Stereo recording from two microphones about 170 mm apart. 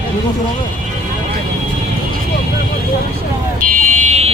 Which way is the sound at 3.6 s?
50° right (ahead or behind).